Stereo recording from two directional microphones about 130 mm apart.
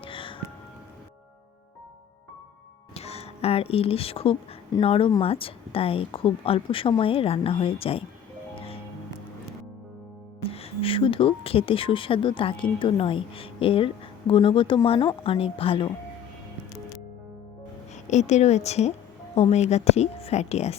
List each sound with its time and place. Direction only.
0.0 s music: 40° left (ahead or behind)
2.9 s music: 50° left (ahead or behind)
4.8 s speech: 45° left (ahead or behind)
8.5 s music: 45° left (ahead or behind)
10.4 s speech: 45° left (ahead or behind)
17.9 s a woman's voice: 65° left (ahead or behind)